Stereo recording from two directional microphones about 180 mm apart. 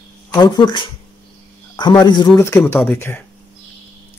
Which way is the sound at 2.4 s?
10° left (ahead or behind).